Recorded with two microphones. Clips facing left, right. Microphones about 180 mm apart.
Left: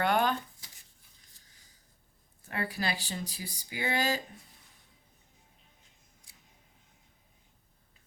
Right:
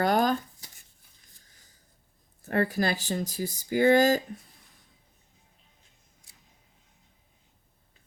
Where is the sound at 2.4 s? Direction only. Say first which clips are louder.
Right 9 dB; 45° right (ahead or behind).